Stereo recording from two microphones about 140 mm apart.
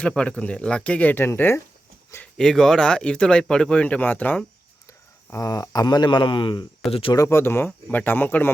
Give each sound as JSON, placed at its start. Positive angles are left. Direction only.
{"t": 0.0, "sound": "speech", "side_deg": 5}
{"t": 2.2, "sound": "speech", "side_deg": 5}
{"t": 5.3, "sound": "speech", "side_deg": 25}
{"t": 7.1, "sound": "speech", "side_deg": 20}